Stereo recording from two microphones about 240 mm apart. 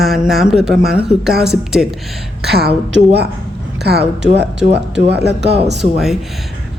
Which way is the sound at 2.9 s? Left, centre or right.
Right.